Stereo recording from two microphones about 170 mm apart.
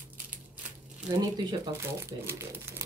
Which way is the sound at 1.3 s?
15° right (ahead or behind).